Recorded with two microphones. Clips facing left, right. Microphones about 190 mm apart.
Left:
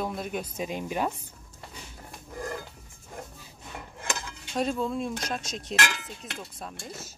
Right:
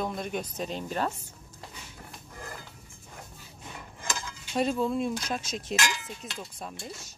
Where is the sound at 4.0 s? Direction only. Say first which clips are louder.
Left 1 dB; 65° left (ahead or behind).